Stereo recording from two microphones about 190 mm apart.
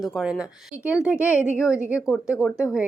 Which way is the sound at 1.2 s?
15° left (ahead or behind).